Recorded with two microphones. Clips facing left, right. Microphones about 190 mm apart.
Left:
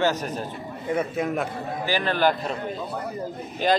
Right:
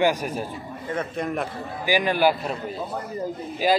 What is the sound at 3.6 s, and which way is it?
Speech, 5° right (ahead or behind).